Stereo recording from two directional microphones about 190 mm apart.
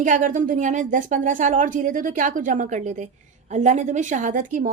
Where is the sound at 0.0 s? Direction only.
45° right (ahead or behind).